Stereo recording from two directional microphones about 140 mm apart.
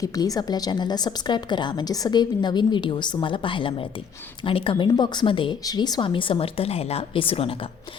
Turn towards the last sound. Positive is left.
turn(degrees=40)  # may be behind; listen again after turning